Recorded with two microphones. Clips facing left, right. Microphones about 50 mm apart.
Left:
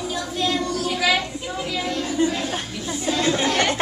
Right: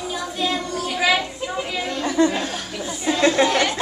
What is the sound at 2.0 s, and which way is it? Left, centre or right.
Chatter, right.